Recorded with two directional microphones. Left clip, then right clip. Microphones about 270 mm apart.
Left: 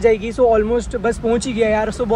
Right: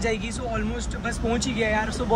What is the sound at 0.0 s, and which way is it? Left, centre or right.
Speech, centre.